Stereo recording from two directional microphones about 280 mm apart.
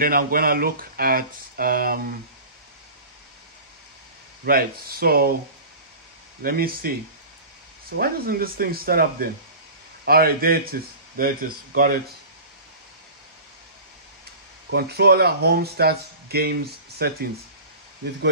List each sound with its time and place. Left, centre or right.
0.0 s speech: right
4.5 s speech: right
6.4 s speech: right
8.0 s speech: right
14.7 s speech: right